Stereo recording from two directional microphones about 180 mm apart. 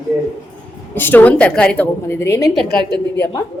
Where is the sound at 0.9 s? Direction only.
10° left (ahead or behind).